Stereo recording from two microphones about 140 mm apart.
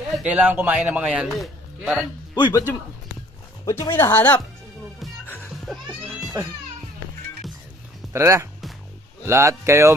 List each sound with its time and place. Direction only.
0.2 s a man's voice: 10° right (ahead or behind)
2.3 s speech: 30° left (ahead or behind)
3.6 s speech: 20° left (ahead or behind)
5.2 s music: 15° left (ahead or behind)
8.1 s speech: 20° right (ahead or behind)